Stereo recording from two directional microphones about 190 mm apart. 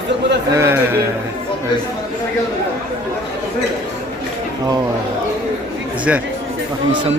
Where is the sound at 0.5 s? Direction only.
15° right (ahead or behind).